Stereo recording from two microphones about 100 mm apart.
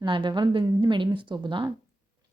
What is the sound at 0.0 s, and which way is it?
A woman's voice, 55° right (ahead or behind).